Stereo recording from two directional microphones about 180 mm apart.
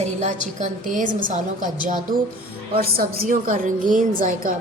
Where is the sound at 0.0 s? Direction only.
40° right (ahead or behind).